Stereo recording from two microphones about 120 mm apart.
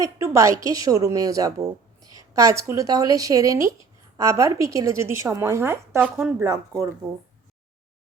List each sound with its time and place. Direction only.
0.0 s speech: 25° right (ahead or behind)
6.0 s speech: 10° right (ahead or behind)
6.4 s speech: 25° right (ahead or behind)